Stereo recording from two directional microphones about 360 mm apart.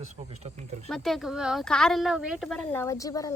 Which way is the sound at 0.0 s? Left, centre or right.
Centre.